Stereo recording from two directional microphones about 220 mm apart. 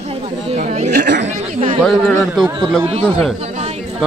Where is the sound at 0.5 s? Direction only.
35° right (ahead or behind).